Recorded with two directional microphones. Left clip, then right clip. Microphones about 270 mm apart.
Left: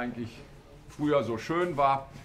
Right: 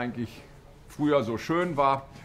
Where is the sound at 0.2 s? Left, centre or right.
Right.